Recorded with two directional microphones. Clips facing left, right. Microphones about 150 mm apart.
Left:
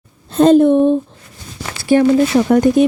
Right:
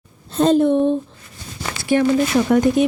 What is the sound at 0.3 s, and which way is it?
Speech, 60° left (ahead or behind).